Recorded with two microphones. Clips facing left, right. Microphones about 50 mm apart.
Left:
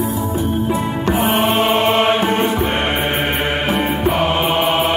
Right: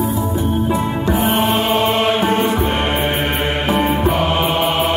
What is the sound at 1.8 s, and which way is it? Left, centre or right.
Music, left.